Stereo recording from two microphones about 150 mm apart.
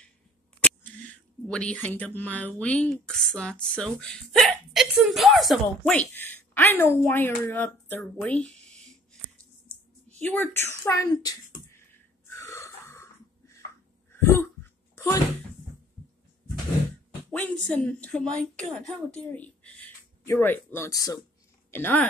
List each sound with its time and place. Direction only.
1.5 s speech: 10° left (ahead or behind)
10.1 s speech: 10° left (ahead or behind)
11.7 s wheeze: 15° left (ahead or behind)
14.1 s throat clearing: 15° left (ahead or behind)
17.3 s speech: 10° left (ahead or behind)
20.9 s speech: 25° left (ahead or behind)